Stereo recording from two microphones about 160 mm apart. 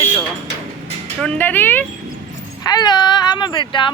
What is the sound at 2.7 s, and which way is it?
Speech, 25° left (ahead or behind).